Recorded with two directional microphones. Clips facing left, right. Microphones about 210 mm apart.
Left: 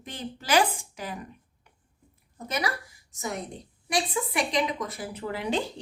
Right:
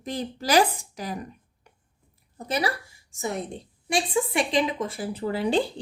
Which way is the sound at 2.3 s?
35° right (ahead or behind).